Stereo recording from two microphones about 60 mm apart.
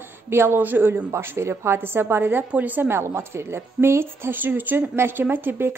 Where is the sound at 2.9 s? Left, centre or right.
Right.